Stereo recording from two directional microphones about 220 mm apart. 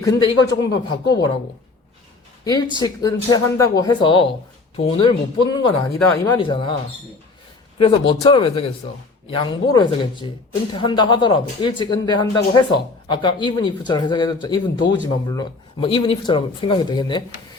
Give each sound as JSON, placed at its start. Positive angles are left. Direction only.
{"t": 0.0, "sound": "speech", "side_deg": 15}
{"t": 2.7, "sound": "speech", "side_deg": 20}
{"t": 7.8, "sound": "speech", "side_deg": 25}